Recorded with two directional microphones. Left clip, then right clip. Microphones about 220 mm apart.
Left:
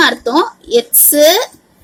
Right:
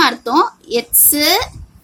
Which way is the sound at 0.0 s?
30° right (ahead or behind).